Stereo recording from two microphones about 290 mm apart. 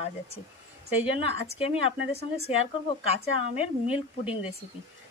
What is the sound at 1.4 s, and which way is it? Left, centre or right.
Speech, centre.